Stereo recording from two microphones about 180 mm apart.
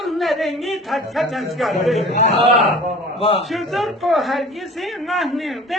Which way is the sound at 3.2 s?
35° left (ahead or behind).